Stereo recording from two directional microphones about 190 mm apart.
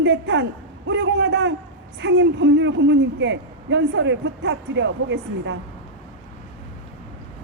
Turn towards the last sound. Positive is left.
turn(degrees=-70)  # may be behind; listen again after turning